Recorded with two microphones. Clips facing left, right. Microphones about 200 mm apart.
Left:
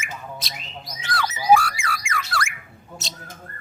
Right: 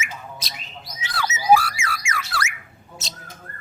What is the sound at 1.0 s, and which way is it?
Whistling, 5° right (ahead or behind).